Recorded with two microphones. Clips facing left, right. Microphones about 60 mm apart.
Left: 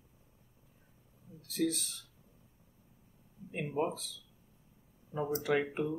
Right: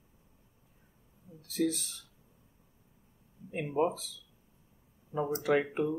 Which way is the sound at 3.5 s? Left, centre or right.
Centre.